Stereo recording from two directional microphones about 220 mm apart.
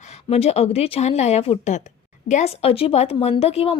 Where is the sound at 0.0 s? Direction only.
30° left (ahead or behind).